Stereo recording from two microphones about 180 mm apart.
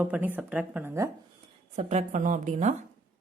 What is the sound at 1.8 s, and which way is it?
Speech, 40° right (ahead or behind).